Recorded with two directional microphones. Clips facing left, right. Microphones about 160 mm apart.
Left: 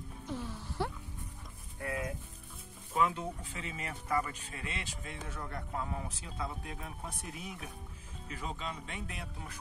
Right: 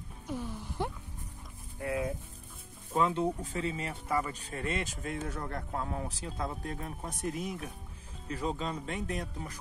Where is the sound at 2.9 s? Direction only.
30° right (ahead or behind).